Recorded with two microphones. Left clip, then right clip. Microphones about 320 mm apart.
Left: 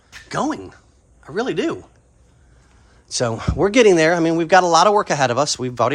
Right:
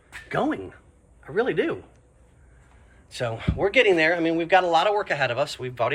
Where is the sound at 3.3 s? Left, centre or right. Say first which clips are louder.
Left 5 dB; left.